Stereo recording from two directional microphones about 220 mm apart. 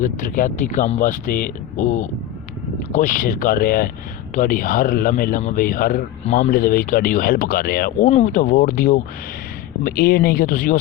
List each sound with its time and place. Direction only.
0.0 s speech: 40° left (ahead or behind)